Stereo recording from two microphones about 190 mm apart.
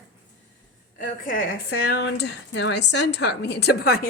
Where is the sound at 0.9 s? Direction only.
45° left (ahead or behind).